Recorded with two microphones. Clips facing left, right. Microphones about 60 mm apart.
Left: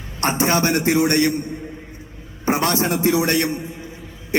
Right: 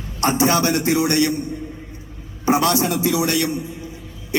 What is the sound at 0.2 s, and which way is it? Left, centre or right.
A man's voice, left.